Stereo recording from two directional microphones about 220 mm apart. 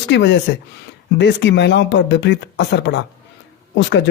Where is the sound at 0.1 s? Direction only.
55° left (ahead or behind).